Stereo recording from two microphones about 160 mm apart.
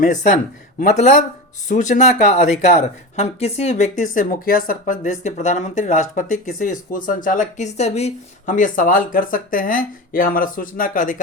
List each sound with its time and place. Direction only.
0.0 s speech: 50° left (ahead or behind)